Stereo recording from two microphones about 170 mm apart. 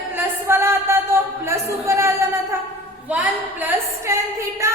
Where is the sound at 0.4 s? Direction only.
15° right (ahead or behind).